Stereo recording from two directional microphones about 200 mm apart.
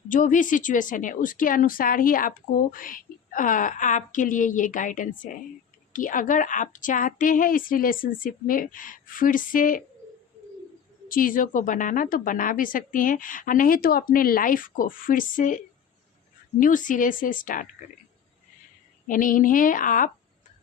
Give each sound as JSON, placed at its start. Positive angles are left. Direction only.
{"t": 0.1, "sound": "a woman's voice", "side_deg": 40}
{"t": 11.1, "sound": "a woman's voice", "side_deg": 45}
{"t": 19.0, "sound": "a woman's voice", "side_deg": 40}